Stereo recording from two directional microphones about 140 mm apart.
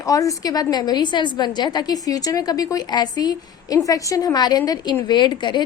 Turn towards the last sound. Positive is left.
turn(degrees=35)  # may be behind; listen again after turning